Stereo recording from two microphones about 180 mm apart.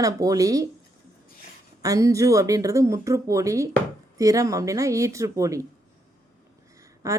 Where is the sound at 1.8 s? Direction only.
20° right (ahead or behind).